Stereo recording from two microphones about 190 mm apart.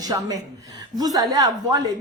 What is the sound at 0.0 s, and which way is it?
A woman's voice, 20° right (ahead or behind).